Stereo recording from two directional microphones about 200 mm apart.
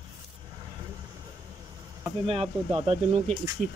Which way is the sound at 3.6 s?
Centre (ahead or behind).